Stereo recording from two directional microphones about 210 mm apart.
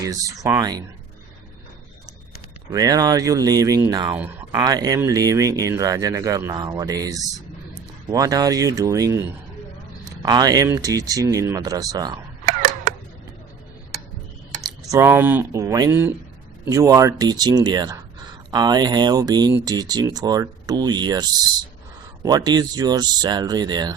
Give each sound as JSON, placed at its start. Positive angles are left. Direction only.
{"t": 0.0, "sound": "speech", "side_deg": -15}
{"t": 2.7, "sound": "speech", "side_deg": -15}
{"t": 10.2, "sound": "speech", "side_deg": -20}
{"t": 14.8, "sound": "speech", "side_deg": -10}